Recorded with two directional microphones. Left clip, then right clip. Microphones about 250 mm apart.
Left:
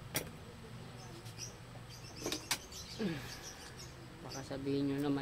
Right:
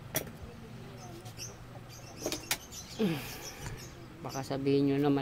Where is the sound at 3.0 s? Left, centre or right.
Right.